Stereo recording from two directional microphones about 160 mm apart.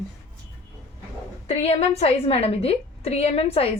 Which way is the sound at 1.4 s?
40° left (ahead or behind).